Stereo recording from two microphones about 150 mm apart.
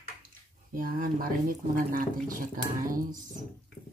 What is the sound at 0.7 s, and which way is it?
Speech, 70° right (ahead or behind).